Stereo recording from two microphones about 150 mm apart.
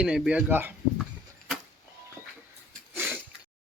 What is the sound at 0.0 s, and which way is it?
Speech, 10° right (ahead or behind).